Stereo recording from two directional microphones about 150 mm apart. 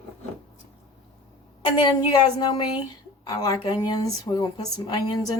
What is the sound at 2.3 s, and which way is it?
A woman's voice, 30° left (ahead or behind).